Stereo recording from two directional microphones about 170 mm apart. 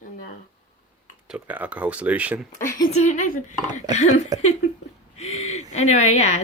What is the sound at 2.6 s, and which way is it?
Speech, 50° left (ahead or behind).